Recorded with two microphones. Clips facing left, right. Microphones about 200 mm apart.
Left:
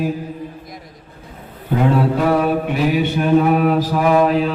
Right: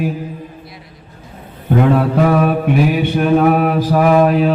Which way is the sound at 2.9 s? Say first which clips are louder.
Right 1 dB; 50° right (ahead or behind).